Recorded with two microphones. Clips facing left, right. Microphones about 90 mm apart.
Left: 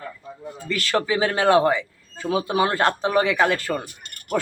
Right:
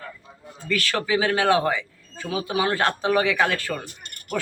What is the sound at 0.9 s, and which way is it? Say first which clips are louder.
Speech: left 2 dB; 35° left (ahead or behind).